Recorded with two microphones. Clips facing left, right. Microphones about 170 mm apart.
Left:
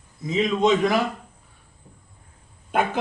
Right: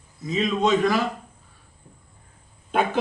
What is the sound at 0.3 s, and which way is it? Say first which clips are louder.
Speech: left 2 dB; 20° left (ahead or behind).